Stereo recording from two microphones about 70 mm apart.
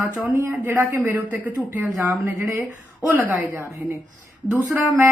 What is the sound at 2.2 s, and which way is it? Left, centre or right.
Speech, right.